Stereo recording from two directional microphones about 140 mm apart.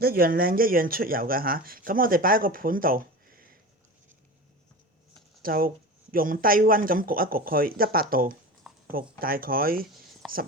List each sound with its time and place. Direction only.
0.0 s speech: 90° right
5.4 s speech: 90° right
10.2 s a sound: centre (ahead or behind)